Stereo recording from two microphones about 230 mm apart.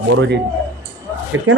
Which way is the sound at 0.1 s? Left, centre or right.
Right.